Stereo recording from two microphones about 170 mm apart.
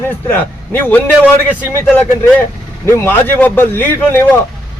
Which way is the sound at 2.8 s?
15° left (ahead or behind).